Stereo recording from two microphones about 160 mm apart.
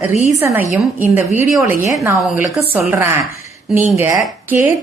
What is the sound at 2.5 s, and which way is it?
Speech, centre (ahead or behind).